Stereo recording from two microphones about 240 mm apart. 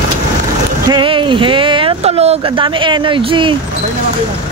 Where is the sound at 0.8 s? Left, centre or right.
Centre.